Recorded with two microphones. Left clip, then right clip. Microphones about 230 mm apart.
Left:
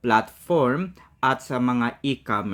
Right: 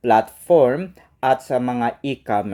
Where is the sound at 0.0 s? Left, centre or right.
Centre.